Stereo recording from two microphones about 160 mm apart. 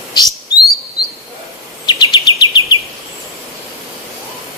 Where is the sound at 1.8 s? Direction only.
25° left (ahead or behind).